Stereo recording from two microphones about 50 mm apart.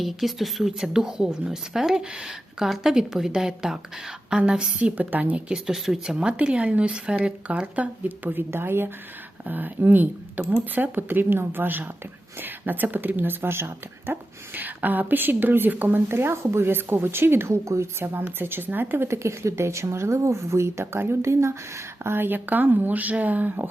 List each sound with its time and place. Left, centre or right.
0.0 s speech: centre
4.8 s speech: right
5.6 s speech: centre
6.1 s speech: right
8.4 s a woman's voice: right
9.5 s speech: right
14.1 s a woman's voice: right
19.0 s speech: right
22.0 s speech: right